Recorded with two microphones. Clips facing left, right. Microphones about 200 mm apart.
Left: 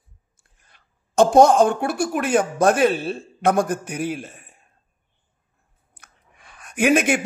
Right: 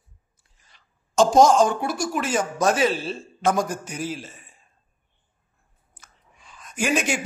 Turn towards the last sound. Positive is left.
turn(degrees=55)  # may be behind; listen again after turning